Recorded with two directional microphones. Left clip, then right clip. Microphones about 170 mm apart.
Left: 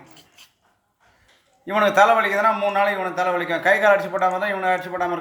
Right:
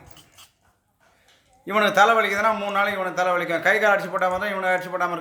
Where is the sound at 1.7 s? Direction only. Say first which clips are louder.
Left 2 dB; 40° right (ahead or behind).